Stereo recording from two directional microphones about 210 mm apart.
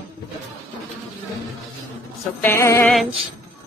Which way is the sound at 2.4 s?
10° left (ahead or behind).